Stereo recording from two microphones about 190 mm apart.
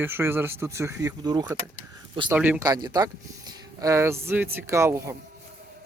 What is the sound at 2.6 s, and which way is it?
Speech, 20° right (ahead or behind).